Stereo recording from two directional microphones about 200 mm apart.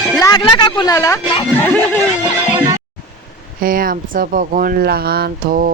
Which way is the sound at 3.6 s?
45° right (ahead or behind).